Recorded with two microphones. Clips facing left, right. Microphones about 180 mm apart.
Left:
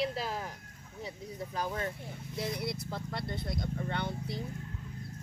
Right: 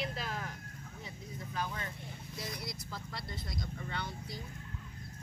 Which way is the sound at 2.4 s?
60° left (ahead or behind).